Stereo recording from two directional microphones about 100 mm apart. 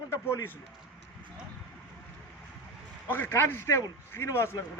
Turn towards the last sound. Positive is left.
turn(degrees=30)  # may be behind; listen again after turning